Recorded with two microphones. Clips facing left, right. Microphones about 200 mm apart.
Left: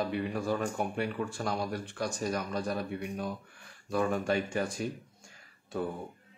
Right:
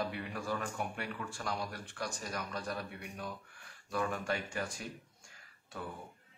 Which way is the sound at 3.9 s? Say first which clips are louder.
Left 7 dB; 30° left (ahead or behind).